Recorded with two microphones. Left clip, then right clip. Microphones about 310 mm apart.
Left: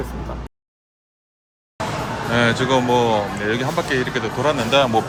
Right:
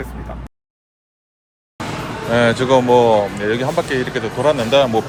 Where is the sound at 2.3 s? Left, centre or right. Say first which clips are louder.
Right 4 dB; centre.